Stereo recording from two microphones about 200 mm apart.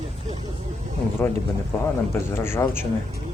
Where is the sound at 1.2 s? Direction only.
10° left (ahead or behind).